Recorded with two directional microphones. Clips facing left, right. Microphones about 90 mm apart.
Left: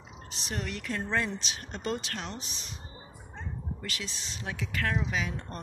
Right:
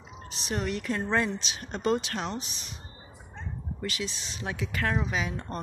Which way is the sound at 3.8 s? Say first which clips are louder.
Right 9 dB; 15° right (ahead or behind).